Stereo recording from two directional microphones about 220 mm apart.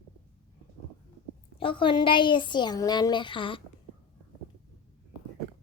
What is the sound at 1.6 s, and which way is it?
Speech, 25° left (ahead or behind).